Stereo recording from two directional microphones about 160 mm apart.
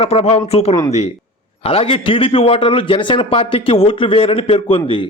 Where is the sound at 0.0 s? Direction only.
40° left (ahead or behind).